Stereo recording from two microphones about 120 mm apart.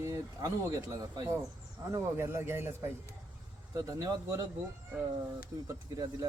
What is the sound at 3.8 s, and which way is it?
Speech, 30° right (ahead or behind).